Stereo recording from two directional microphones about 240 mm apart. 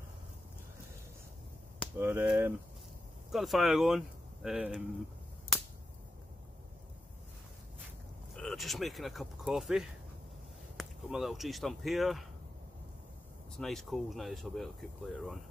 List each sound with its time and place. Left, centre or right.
2.0 s speech: centre
8.4 s speech: centre
13.6 s speech: centre